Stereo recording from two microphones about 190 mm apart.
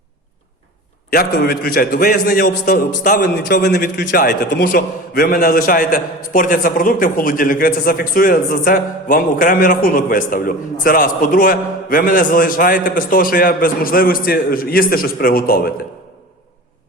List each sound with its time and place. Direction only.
1.1 s a man's voice: 55° left (ahead or behind)
3.2 s a man's voice: 60° left (ahead or behind)